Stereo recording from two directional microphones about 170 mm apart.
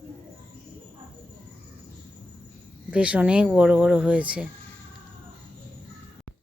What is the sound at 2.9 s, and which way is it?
Speech, 5° right (ahead or behind).